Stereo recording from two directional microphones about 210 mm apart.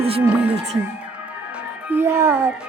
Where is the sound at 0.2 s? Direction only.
5° right (ahead or behind).